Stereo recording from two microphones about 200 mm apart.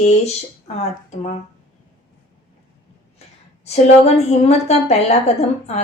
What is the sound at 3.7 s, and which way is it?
A woman's voice, 30° left (ahead or behind).